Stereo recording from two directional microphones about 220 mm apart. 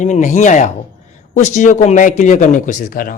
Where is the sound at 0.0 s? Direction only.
35° left (ahead or behind).